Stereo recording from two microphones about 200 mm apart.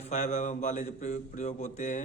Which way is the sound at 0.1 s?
35° left (ahead or behind).